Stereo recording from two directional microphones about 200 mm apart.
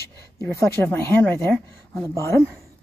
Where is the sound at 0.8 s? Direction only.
10° left (ahead or behind).